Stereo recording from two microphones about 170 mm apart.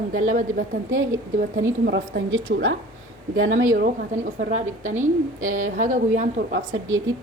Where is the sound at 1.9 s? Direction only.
90° right.